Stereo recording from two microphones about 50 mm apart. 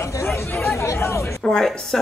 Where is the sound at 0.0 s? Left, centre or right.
Left.